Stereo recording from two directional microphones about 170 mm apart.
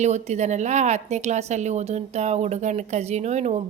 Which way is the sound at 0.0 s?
40° right (ahead or behind).